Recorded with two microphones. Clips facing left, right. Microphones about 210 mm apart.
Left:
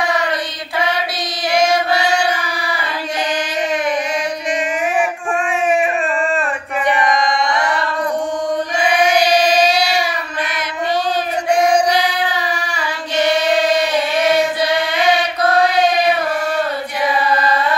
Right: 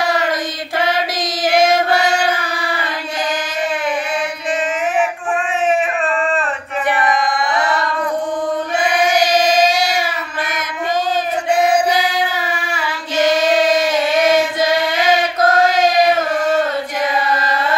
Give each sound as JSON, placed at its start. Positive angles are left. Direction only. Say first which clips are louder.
{"t": 9.2, "sound": "child singing", "louder": "even", "side_deg": -45}
{"t": 15.4, "sound": "chant", "louder": "even", "side_deg": -45}
{"t": 17.3, "sound": "carnatic music", "louder": "left 2 dB", "side_deg": -45}